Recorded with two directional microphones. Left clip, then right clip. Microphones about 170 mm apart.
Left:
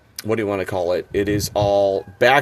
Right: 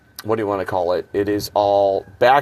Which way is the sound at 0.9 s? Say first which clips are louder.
Even; 80° left.